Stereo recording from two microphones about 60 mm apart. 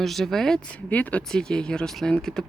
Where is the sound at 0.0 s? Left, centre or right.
Centre.